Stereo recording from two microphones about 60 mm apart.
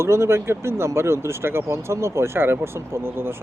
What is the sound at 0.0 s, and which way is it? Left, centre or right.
Speech, right.